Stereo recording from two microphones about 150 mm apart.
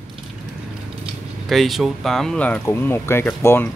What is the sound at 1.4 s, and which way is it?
Speech, centre (ahead or behind).